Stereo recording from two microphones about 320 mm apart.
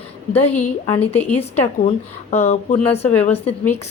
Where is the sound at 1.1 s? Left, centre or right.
Centre.